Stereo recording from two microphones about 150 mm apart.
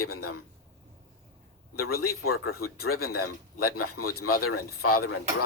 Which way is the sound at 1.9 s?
90° left.